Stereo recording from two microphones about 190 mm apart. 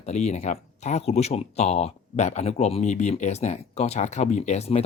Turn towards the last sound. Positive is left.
turn(degrees=35)  # may be behind; listen again after turning